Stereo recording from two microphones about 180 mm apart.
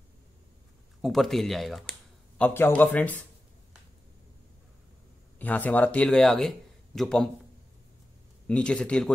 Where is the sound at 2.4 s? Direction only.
15° left (ahead or behind).